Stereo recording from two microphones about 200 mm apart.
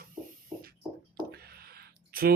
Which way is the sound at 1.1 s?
50° right (ahead or behind).